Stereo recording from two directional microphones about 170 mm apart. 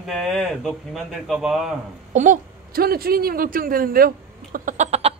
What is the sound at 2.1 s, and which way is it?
Speech, 50° right (ahead or behind).